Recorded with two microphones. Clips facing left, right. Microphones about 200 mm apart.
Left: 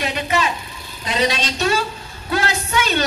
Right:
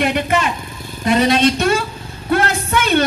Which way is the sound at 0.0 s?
55° right (ahead or behind).